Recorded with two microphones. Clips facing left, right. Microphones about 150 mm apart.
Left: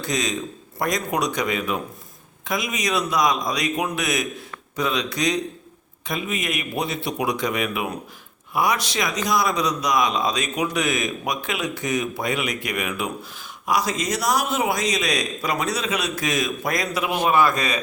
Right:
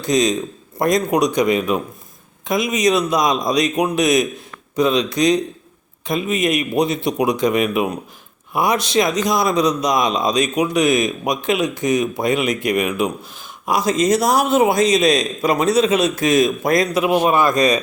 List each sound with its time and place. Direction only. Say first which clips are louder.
0.1 s speech: right 9 dB; 20° right (ahead or behind)
17.5 s speech: right 9 dB; 40° right (ahead or behind)